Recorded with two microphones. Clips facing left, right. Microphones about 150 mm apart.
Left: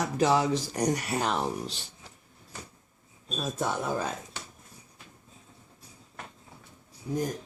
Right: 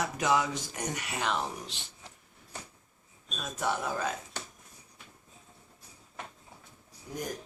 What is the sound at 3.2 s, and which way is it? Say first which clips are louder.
Speech: left 5 dB; 35° left (ahead or behind).